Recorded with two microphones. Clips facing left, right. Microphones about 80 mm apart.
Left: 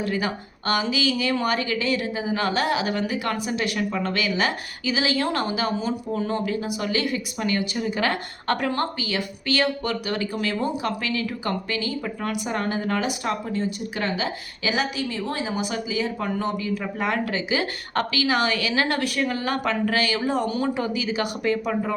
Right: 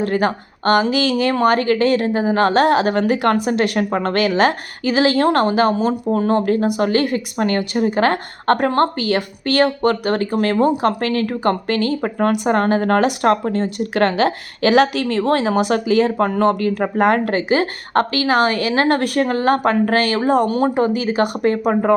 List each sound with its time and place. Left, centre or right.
0.0 s a woman's voice: right